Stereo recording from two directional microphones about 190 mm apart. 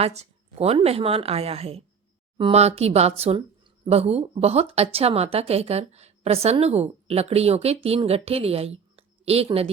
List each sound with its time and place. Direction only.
0.0 s speech: 35° right (ahead or behind)